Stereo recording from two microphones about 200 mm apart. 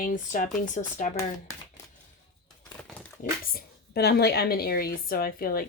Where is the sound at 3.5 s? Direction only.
50° left (ahead or behind).